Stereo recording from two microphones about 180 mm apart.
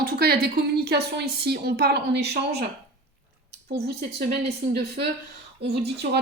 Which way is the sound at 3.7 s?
65° right (ahead or behind).